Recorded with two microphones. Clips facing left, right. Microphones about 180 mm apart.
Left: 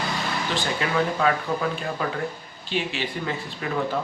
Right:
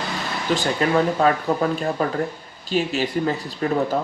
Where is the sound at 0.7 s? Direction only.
40° right (ahead or behind).